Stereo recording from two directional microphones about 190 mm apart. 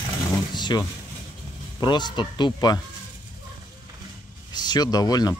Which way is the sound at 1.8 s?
25° left (ahead or behind).